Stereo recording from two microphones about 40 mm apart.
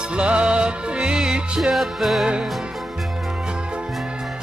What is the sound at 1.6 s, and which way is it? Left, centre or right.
Music, centre.